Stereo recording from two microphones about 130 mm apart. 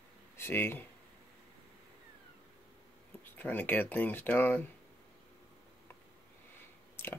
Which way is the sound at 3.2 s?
15° left (ahead or behind).